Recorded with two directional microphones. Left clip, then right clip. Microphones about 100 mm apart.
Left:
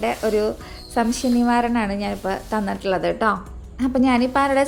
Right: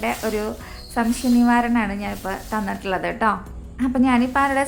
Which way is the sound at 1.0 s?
30° left (ahead or behind).